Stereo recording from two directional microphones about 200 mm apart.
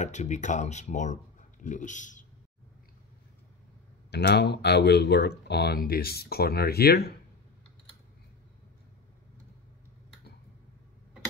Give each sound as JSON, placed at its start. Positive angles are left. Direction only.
{"t": 0.0, "sound": "speech", "side_deg": 35}
{"t": 4.1, "sound": "speech", "side_deg": 55}